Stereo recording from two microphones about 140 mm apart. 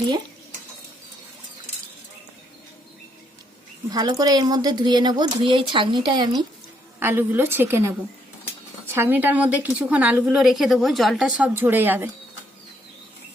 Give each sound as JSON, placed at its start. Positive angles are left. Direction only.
{"t": 3.8, "sound": "speech", "side_deg": -30}
{"t": 7.0, "sound": "a woman's voice", "side_deg": -15}